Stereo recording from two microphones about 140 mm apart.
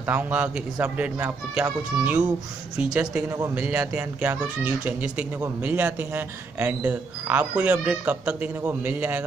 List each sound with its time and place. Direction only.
0.0 s a man's voice: 15° right (ahead or behind)
3.3 s a man's voice: 20° right (ahead or behind)